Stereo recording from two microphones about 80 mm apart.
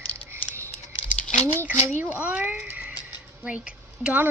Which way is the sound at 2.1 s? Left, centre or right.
Centre.